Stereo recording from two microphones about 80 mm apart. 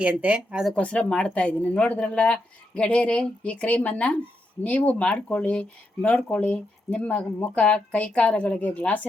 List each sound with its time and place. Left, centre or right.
0.0 s speech: centre
0.8 s speech: centre